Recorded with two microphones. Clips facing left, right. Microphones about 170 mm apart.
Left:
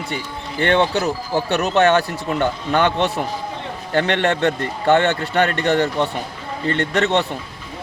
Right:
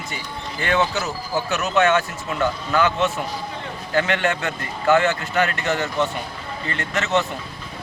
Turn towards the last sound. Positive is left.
turn(degrees=35)  # may be behind; listen again after turning